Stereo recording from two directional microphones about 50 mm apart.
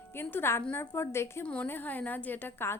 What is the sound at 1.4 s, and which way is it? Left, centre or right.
A woman's voice, left.